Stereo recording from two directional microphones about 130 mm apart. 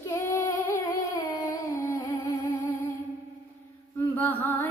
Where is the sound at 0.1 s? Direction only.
20° left (ahead or behind).